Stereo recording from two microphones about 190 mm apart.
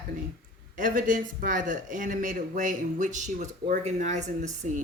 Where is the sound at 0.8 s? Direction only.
45° right (ahead or behind).